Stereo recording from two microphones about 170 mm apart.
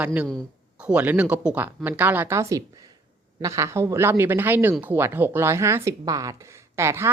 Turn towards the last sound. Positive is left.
turn(degrees=-15)  # may be behind; listen again after turning